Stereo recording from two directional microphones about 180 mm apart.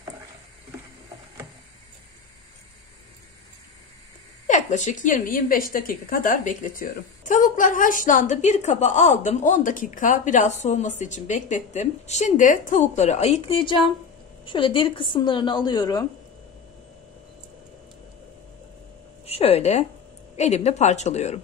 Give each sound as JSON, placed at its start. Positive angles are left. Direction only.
{"t": 4.5, "sound": "a woman's voice", "side_deg": 40}
{"t": 19.2, "sound": "speech", "side_deg": 35}